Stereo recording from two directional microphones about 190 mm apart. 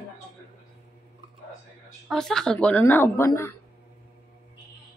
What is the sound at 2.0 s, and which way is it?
Speech, centre (ahead or behind).